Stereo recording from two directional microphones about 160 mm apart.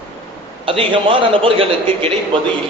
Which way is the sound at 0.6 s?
30° right (ahead or behind).